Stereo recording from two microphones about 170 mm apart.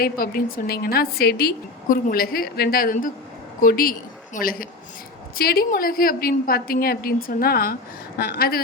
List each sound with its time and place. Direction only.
0.0 s a woman's voice: 60° left (ahead or behind)